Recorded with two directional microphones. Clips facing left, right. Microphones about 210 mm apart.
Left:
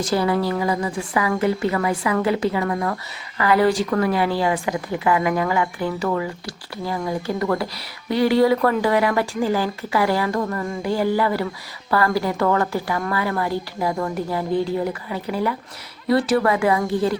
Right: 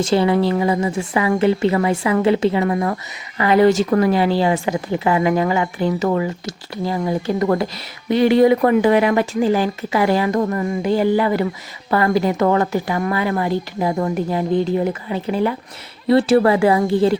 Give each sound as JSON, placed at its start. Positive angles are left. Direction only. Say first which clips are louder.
{"t": 0.0, "sound": "a woman's voice", "louder": "right 4 dB", "side_deg": -25}